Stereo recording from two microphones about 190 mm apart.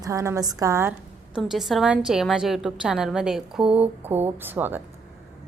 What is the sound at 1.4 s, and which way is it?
A woman's voice, centre (ahead or behind).